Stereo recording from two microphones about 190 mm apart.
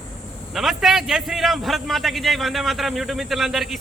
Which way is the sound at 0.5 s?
Centre (ahead or behind).